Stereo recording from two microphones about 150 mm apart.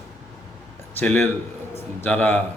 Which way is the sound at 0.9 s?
15° left (ahead or behind).